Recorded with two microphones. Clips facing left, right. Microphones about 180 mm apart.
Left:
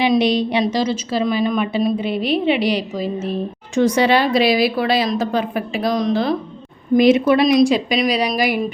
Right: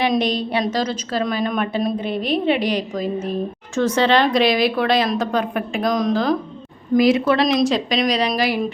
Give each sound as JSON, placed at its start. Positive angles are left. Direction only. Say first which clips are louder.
{"t": 0.1, "sound": "speech", "louder": "left 4 dB", "side_deg": 10}
{"t": 6.9, "sound": "a woman's voice", "louder": "left 3 dB", "side_deg": 20}